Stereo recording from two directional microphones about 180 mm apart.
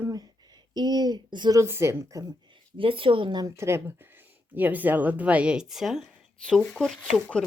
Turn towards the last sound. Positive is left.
turn(degrees=5)  # may be behind; listen again after turning